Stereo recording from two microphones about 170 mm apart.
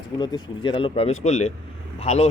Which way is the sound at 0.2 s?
25° left (ahead or behind).